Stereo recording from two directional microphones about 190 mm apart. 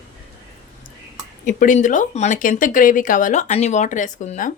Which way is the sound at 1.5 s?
40° left (ahead or behind).